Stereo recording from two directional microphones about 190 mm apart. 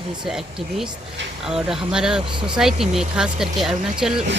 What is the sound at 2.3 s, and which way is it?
Speech, 25° right (ahead or behind).